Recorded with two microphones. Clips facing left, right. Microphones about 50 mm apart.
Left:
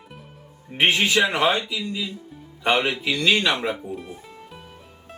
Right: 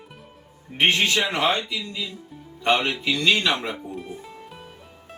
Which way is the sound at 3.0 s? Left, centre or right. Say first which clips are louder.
Left 1 dB; centre.